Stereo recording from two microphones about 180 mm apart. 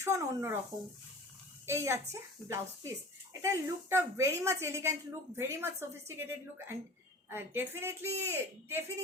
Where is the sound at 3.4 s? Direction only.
15° right (ahead or behind).